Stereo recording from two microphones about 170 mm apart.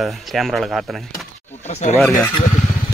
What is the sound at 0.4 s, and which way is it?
Speech, centre (ahead or behind).